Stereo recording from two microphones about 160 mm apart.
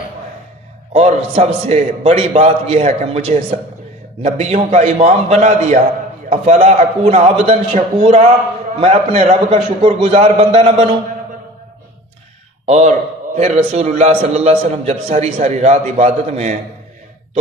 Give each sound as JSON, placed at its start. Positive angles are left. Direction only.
{"t": 0.9, "sound": "a man's voice", "side_deg": -40}
{"t": 12.6, "sound": "a man's voice", "side_deg": -45}